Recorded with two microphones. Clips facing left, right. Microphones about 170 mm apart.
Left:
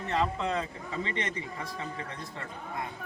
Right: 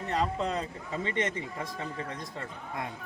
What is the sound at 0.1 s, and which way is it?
Speech, 40° right (ahead or behind).